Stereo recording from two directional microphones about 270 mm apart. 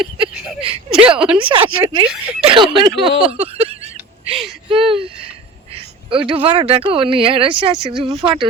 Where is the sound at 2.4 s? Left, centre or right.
Centre.